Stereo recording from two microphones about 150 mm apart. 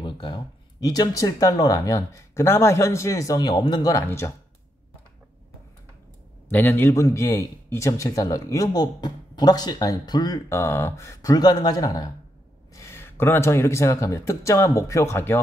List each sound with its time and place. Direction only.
0.0 s a man's voice: 30° left (ahead or behind)
6.5 s a man's voice: 15° left (ahead or behind)